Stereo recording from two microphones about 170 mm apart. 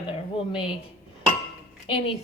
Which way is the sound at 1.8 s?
30° left (ahead or behind).